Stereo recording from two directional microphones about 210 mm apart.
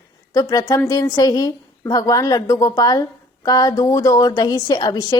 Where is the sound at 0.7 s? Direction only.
15° left (ahead or behind).